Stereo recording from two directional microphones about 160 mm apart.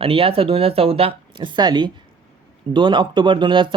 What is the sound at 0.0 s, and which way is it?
Speech, 35° right (ahead or behind).